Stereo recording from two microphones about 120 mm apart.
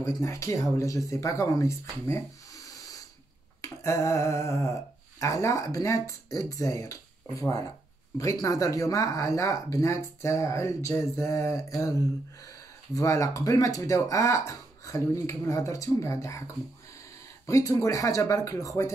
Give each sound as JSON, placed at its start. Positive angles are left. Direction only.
{"t": 0.0, "sound": "speech", "side_deg": 25}
{"t": 3.6, "sound": "speech", "side_deg": 25}